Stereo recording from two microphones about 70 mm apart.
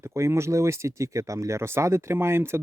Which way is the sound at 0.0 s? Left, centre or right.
Right.